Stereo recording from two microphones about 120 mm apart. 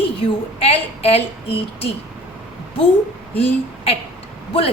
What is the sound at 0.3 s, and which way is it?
A woman's voice, 55° left (ahead or behind).